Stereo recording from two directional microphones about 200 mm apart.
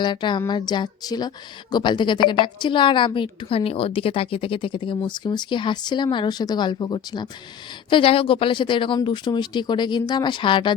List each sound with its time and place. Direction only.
0.0 s a woman's voice: 25° left (ahead or behind)